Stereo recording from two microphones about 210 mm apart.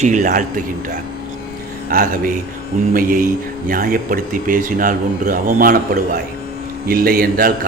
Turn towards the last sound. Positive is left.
turn(degrees=-45)  # may be behind; listen again after turning